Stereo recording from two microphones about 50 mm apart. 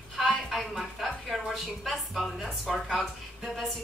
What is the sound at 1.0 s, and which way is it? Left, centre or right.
A woman's voice, centre.